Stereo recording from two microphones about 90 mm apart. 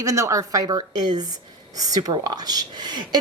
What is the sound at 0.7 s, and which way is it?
Speech, 50° right (ahead or behind).